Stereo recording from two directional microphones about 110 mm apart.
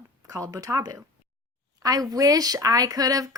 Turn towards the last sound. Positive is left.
turn(degrees=-35)  # may be behind; listen again after turning